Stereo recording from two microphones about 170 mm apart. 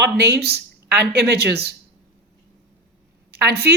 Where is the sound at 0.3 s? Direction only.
75° right (ahead or behind).